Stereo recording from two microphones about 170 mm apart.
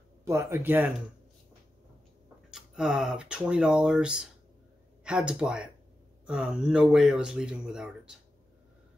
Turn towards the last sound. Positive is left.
turn(degrees=-5)  # may be behind; listen again after turning